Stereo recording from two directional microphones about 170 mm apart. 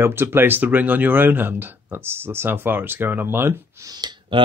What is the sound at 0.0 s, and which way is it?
Speech, 15° right (ahead or behind).